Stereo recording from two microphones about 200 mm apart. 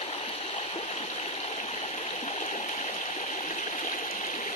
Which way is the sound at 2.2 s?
35° left (ahead or behind).